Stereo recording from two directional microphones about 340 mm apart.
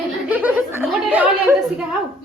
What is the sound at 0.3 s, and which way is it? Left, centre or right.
Chuckle, centre.